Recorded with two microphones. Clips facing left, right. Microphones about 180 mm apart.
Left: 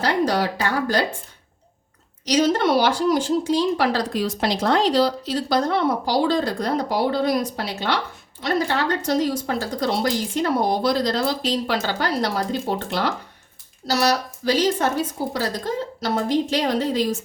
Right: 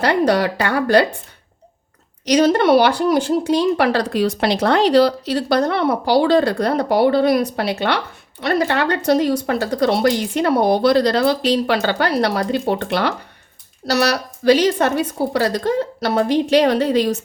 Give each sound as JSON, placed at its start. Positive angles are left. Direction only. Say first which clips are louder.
{"t": 0.0, "sound": "speech", "louder": "right 5 dB", "side_deg": -65}
{"t": 2.2, "sound": "a woman's voice", "louder": "right 5 dB", "side_deg": -65}